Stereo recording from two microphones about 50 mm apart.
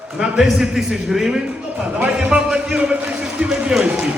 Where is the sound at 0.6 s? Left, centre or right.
Centre.